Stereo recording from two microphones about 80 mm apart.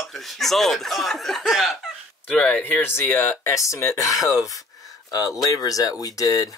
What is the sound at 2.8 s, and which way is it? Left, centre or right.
Speech, left.